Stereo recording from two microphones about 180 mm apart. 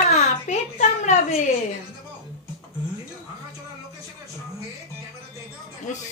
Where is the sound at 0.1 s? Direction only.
40° left (ahead or behind).